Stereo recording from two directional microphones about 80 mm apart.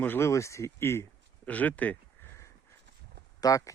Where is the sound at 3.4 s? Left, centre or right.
Left.